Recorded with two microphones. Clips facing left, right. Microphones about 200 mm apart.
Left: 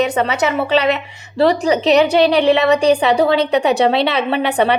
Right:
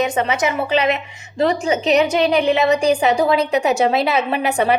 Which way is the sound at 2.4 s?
75° left (ahead or behind).